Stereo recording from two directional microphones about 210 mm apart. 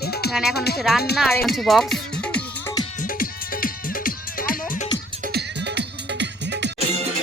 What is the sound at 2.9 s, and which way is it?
Music, 40° left (ahead or behind).